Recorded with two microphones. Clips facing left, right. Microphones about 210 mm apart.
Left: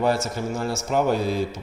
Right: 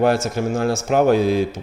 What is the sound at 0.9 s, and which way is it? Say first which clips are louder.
Mantra: right 6 dB; 85° right.